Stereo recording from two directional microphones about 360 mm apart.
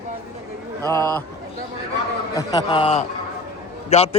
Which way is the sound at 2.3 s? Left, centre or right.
Centre.